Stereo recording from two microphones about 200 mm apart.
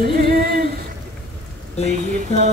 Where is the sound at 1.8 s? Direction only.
40° right (ahead or behind).